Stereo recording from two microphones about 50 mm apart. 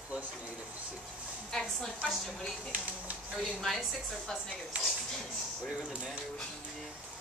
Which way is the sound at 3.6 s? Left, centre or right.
Centre.